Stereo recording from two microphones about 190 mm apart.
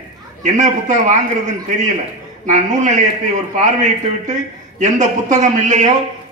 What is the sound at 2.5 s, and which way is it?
A man's voice, 40° right (ahead or behind).